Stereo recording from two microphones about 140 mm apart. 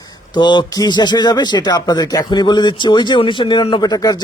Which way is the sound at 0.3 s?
30° left (ahead or behind).